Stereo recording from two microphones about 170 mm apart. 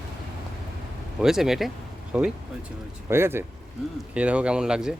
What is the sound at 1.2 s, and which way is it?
Speech, 5° right (ahead or behind).